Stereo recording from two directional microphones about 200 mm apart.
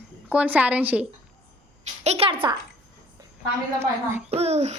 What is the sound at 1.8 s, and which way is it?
Speech, 35° right (ahead or behind).